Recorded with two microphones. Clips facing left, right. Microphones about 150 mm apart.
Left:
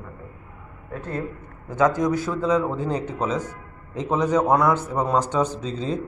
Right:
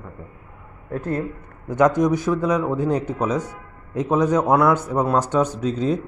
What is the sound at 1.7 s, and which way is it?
A man's voice, 15° right (ahead or behind).